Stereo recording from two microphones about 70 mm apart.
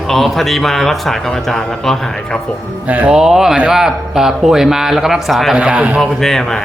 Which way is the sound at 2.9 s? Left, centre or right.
Centre.